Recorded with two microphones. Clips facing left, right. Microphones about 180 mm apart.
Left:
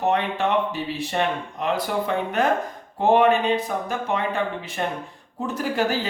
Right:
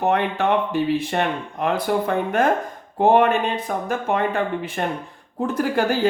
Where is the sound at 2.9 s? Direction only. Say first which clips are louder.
Right 1 dB; 50° right (ahead or behind).